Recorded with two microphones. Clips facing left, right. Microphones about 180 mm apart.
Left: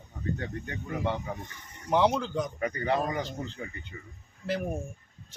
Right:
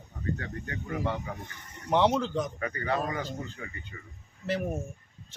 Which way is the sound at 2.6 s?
20° left (ahead or behind).